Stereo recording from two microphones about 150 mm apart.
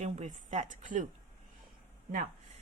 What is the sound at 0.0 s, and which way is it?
A woman's voice, 50° right (ahead or behind).